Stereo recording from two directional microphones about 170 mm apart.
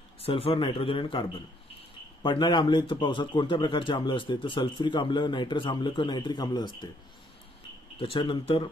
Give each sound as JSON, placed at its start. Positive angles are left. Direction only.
{"t": 0.2, "sound": "a man's voice", "side_deg": 35}
{"t": 2.2, "sound": "a man's voice", "side_deg": 25}
{"t": 8.0, "sound": "a man's voice", "side_deg": 30}